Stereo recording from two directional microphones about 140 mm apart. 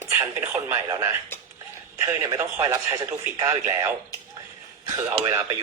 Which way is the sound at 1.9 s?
20° right (ahead or behind).